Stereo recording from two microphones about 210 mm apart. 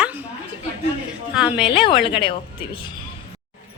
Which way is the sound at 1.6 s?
25° left (ahead or behind).